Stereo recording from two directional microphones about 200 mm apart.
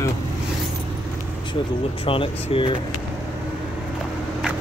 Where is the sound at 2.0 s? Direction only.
25° left (ahead or behind).